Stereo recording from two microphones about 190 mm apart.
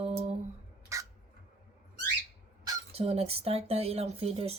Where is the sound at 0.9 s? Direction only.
15° right (ahead or behind).